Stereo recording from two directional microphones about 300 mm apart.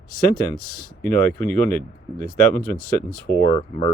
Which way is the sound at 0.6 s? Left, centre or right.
Centre.